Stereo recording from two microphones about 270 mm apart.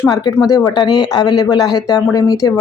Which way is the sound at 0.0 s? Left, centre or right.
Centre.